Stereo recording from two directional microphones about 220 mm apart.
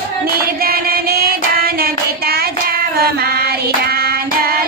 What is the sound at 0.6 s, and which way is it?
Child singing, 45° right (ahead or behind).